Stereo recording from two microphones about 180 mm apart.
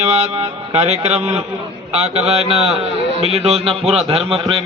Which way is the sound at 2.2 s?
35° right (ahead or behind).